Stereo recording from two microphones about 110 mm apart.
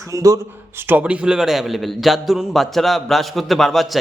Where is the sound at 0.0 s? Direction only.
30° right (ahead or behind).